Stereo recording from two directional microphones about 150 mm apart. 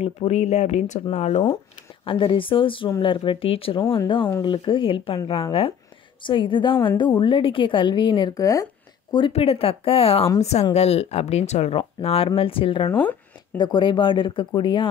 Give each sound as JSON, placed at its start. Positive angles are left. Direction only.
{"t": 0.0, "sound": "speech", "side_deg": 45}
{"t": 2.0, "sound": "a woman's voice", "side_deg": 35}
{"t": 9.1, "sound": "a woman's voice", "side_deg": 35}